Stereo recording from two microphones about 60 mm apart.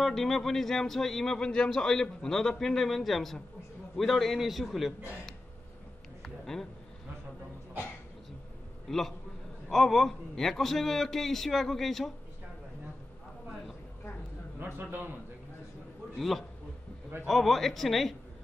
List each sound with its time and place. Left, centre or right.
0.0 s a man's voice: centre
6.2 s a sound: centre
8.8 s a man's voice: centre
14.6 s a man's voice: right
16.2 s a man's voice: centre